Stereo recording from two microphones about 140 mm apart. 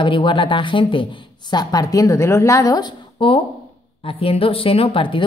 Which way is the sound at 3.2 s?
40° left (ahead or behind).